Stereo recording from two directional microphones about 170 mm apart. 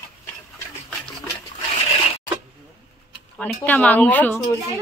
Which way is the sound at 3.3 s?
5° left (ahead or behind).